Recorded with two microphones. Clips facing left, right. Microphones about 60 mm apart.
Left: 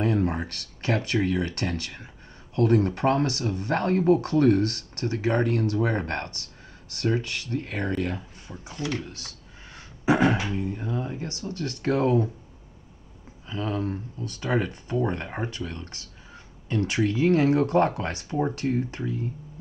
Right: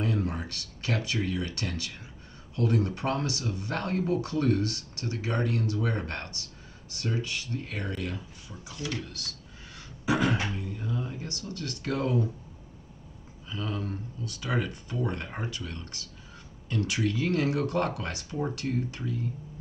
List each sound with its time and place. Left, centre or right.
0.0 s speech: left
10.0 s beatboxing: left
10.5 s speech: left
13.5 s speech: left